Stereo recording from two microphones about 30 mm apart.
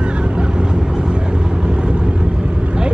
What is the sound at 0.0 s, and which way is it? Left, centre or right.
Vehicle, right.